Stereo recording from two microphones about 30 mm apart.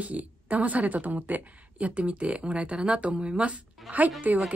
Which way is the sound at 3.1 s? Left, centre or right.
Right.